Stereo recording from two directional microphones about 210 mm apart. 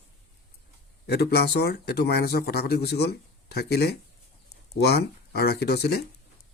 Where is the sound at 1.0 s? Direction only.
50° left (ahead or behind).